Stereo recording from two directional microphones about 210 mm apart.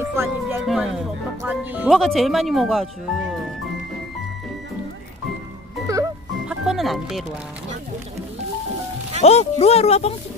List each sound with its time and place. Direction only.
0.0 s speech: 10° right (ahead or behind)
0.7 s speech: centre (ahead or behind)
5.9 s music: 15° right (ahead or behind)
6.5 s music: centre (ahead or behind)
9.2 s speech: 30° left (ahead or behind)